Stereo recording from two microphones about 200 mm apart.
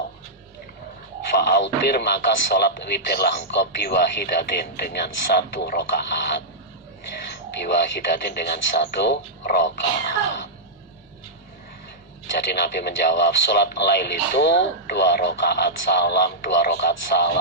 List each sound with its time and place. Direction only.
1.4 s speech: 60° left (ahead or behind)
8.2 s speech: 55° left (ahead or behind)
12.5 s speech: 55° left (ahead or behind)